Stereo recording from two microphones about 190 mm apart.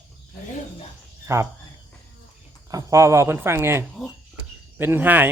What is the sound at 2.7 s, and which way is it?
Speech, 15° right (ahead or behind).